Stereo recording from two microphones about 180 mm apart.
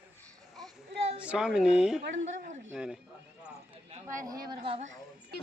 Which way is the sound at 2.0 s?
90° right.